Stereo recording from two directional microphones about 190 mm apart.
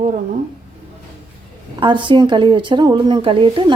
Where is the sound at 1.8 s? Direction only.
25° right (ahead or behind).